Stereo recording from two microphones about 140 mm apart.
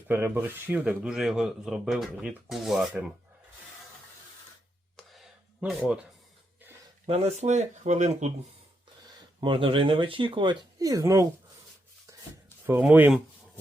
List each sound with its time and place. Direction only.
0.1 s speech: 15° right (ahead or behind)
4.9 s a sound: centre (ahead or behind)
7.1 s speech: 50° right (ahead or behind)
9.4 s speech: 40° right (ahead or behind); by 11.3 s 25° right (ahead or behind)
12.8 s speech: 10° right (ahead or behind)